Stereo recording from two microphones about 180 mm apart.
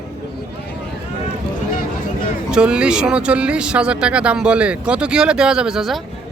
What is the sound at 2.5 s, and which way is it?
Speech, 5° right (ahead or behind).